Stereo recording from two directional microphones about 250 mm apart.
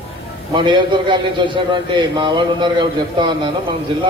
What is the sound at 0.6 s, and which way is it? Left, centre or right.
A man's voice, centre.